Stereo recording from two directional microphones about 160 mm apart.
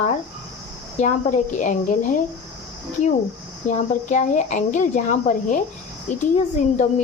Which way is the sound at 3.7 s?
45° left (ahead or behind).